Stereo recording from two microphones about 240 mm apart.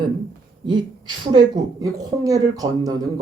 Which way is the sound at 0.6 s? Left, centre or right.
Centre.